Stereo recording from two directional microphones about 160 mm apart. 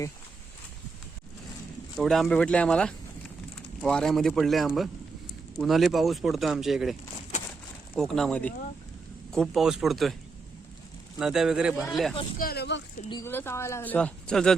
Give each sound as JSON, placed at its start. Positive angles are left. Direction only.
{"t": 2.0, "sound": "speech", "side_deg": 0}
{"t": 7.9, "sound": "speech", "side_deg": 5}
{"t": 11.2, "sound": "speech", "side_deg": -5}
{"t": 12.4, "sound": "speech", "side_deg": 80}
{"t": 13.2, "sound": "speech", "side_deg": 15}